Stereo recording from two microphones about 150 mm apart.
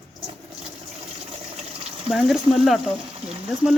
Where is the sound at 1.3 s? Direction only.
45° right (ahead or behind).